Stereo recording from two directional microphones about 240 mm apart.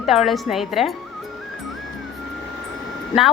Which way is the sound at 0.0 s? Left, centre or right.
Centre.